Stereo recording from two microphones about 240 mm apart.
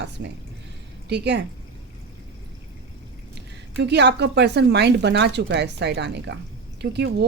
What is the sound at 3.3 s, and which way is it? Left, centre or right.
A woman's voice, right.